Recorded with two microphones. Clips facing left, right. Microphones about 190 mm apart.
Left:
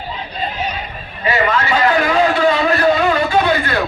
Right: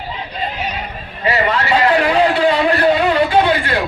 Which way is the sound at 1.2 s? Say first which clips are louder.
Even; 35° right (ahead or behind).